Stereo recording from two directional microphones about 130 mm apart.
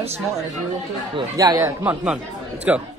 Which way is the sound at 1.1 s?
30° right (ahead or behind).